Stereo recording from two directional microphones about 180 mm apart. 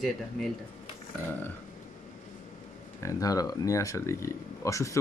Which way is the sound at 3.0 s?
20° left (ahead or behind).